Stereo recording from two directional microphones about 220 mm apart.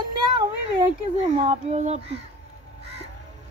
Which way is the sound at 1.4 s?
25° right (ahead or behind).